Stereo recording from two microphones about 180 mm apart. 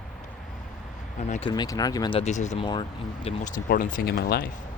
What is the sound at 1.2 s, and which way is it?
Speech, 40° left (ahead or behind).